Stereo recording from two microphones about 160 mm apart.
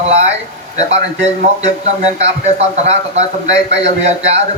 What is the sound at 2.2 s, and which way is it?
A man's voice, 40° right (ahead or behind).